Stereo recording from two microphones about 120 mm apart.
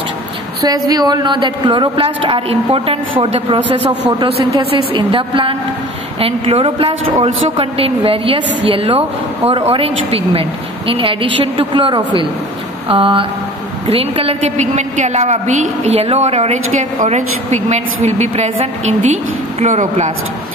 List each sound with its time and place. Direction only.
0.8 s a woman's voice: 35° right (ahead or behind); by 19.1 s 70° right (ahead or behind)
19.6 s speech: 85° right